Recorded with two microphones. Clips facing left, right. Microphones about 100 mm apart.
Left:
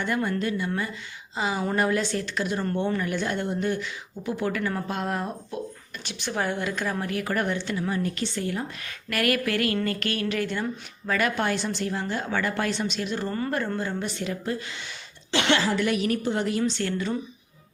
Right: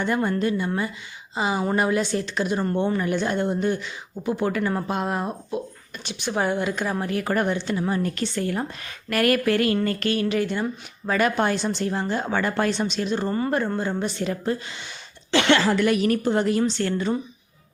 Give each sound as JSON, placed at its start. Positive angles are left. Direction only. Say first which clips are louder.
{"t": 0.0, "sound": "speech", "louder": "right 4 dB", "side_deg": -30}
{"t": 7.1, "sound": "speech", "louder": "right 5 dB", "side_deg": -35}
{"t": 7.4, "sound": "speech", "louder": "right 3 dB", "side_deg": -20}
{"t": 8.1, "sound": "a woman's voice", "louder": "right 3 dB", "side_deg": -50}
{"t": 9.0, "sound": "speech", "louder": "right 5 dB", "side_deg": -35}
{"t": 15.3, "sound": "a woman's voice", "louder": "right 4 dB", "side_deg": -55}